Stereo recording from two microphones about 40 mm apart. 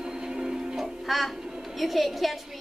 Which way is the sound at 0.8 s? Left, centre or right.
Centre.